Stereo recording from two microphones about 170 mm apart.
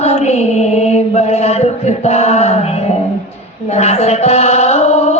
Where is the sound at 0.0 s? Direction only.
40° left (ahead or behind).